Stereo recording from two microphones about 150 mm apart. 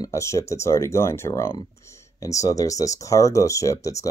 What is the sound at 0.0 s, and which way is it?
Speech, 20° left (ahead or behind).